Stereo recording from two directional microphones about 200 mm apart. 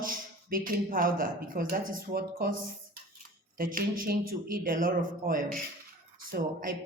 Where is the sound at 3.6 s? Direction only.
45° right (ahead or behind).